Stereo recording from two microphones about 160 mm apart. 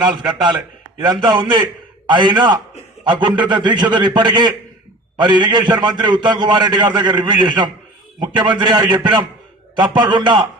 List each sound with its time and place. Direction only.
0.3 s a man's voice: 25° right (ahead or behind)